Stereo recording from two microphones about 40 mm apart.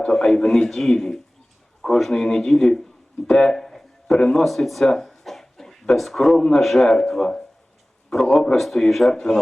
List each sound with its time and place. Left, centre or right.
0.1 s a man's voice: centre
3.2 s a sound: centre
4.2 s a man's voice: centre
4.4 s speech: centre
4.9 s a sound: centre
5.9 s a man's voice: centre
9.1 s a man's voice: centre